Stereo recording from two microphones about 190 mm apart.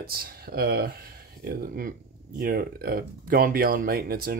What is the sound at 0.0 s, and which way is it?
Speech, 55° right (ahead or behind).